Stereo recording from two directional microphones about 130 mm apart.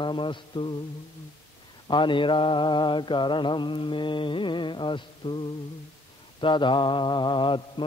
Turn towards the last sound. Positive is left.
turn(degrees=40)  # may be behind; listen again after turning